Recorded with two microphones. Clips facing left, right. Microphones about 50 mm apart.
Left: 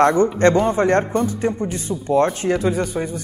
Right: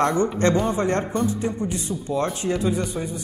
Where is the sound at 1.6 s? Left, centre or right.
Left.